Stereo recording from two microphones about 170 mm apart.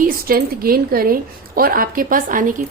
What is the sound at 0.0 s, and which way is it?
A woman's voice, 60° right (ahead or behind).